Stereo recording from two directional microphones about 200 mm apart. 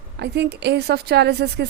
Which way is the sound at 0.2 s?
55° right (ahead or behind).